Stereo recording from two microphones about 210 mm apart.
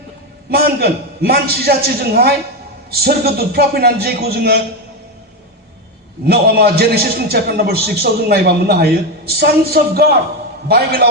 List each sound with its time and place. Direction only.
0.5 s a man's voice: 45° right (ahead or behind)
6.2 s a man's voice: 50° right (ahead or behind)